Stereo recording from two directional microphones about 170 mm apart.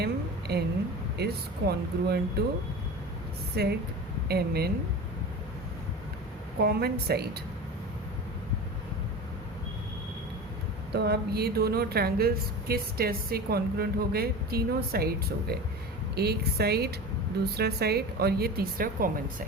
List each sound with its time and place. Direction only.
0.0 s a woman's voice: 70° right (ahead or behind)
3.5 s a woman's voice: 70° right (ahead or behind)
6.6 s a woman's voice: 70° right (ahead or behind)
10.9 s a woman's voice: 70° right (ahead or behind)